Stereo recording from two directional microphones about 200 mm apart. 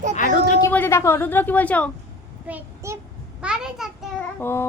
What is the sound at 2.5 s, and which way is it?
A child's voice, 10° right (ahead or behind).